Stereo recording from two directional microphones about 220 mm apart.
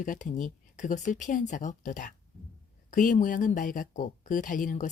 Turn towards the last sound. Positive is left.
turn(degrees=35)  # may be behind; listen again after turning